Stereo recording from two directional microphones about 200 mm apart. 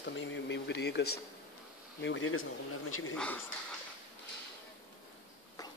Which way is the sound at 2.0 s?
65° left (ahead or behind).